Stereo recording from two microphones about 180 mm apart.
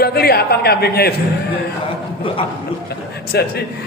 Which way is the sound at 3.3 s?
60° left (ahead or behind).